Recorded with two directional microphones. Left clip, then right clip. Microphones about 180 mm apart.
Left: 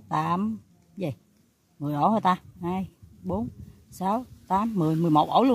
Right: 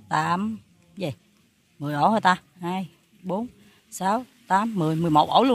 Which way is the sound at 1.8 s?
5° right (ahead or behind).